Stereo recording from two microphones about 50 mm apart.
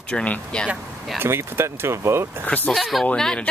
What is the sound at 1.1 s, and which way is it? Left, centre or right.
Speech, right.